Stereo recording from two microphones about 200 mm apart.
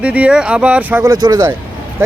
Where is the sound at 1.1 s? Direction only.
20° right (ahead or behind).